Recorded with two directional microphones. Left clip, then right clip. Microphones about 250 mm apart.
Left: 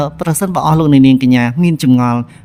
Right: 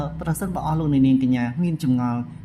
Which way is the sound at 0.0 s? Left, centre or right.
Left.